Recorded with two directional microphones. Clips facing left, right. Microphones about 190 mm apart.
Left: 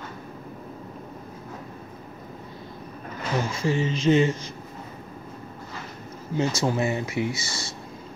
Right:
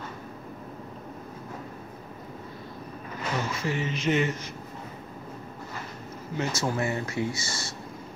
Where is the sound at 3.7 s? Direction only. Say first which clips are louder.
Left 6 dB; 30° left (ahead or behind).